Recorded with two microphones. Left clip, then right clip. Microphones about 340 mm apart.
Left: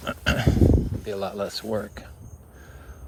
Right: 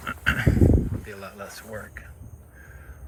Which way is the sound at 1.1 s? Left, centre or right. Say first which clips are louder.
Left 10 dB; centre.